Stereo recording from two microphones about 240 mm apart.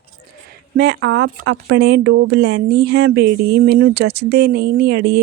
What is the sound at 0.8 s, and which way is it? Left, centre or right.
Speech, right.